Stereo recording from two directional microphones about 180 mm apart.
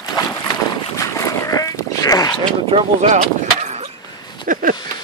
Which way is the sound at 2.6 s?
35° right (ahead or behind).